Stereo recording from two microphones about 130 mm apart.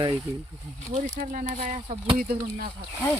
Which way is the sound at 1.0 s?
70° right (ahead or behind).